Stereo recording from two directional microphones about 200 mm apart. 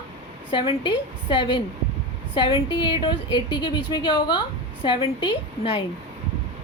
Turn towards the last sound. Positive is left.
turn(degrees=25)  # may be behind; listen again after turning